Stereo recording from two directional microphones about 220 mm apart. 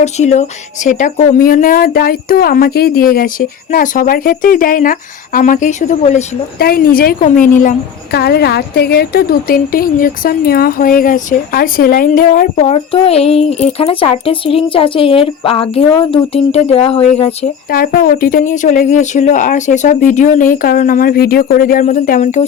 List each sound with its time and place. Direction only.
0.0 s a woman's voice: 30° left (ahead or behind)
6.6 s a woman's voice: 45° left (ahead or behind); by 17.5 s 30° left (ahead or behind)
17.7 s a woman's voice: 40° left (ahead or behind)